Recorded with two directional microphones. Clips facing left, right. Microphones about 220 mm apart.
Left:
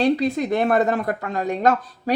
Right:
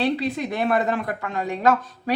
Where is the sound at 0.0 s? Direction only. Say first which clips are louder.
Left 4 dB; 45° left (ahead or behind).